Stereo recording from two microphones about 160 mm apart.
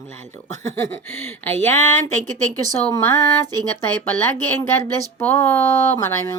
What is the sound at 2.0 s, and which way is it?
Speech, 50° right (ahead or behind).